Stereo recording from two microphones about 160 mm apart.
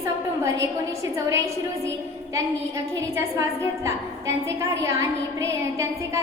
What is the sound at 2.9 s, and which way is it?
A woman's voice, 20° right (ahead or behind).